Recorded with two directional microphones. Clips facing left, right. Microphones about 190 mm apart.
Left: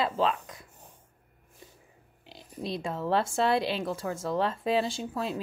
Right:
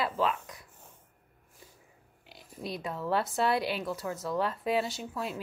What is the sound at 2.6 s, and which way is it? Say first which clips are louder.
A woman's voice: left 3 dB; 25° left (ahead or behind).